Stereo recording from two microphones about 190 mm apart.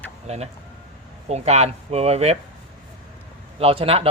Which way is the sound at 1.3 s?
35° right (ahead or behind).